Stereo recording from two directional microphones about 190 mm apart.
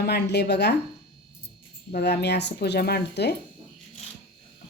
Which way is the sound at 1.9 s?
55° left (ahead or behind).